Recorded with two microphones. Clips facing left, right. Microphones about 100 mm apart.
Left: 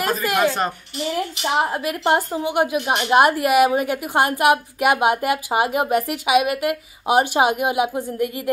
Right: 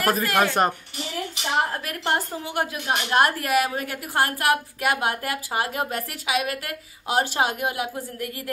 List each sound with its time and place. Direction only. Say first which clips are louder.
0.2 s a woman's voice: left 1 dB; 15° left (ahead or behind)